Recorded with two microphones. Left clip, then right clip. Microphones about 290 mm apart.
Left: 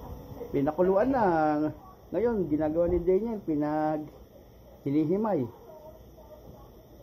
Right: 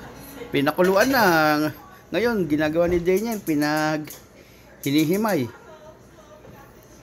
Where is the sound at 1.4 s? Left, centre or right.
Right.